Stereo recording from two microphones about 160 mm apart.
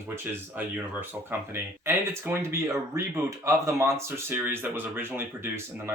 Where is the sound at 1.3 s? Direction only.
15° right (ahead or behind).